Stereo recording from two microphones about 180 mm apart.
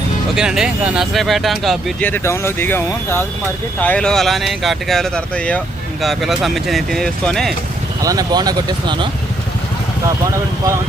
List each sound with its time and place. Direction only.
0.3 s speech: 5° right (ahead or behind)
8.0 s speech: 20° right (ahead or behind)